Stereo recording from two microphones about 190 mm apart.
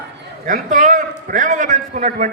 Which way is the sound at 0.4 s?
45° right (ahead or behind).